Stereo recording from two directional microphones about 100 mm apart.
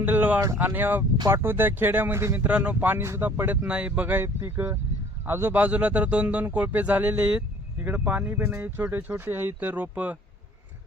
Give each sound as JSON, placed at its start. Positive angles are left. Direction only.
{"t": 0.0, "sound": "speech", "side_deg": -15}